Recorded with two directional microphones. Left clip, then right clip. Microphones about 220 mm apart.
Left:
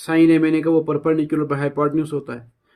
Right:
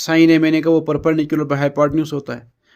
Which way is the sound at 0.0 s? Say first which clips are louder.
Right 2 dB; 35° right (ahead or behind).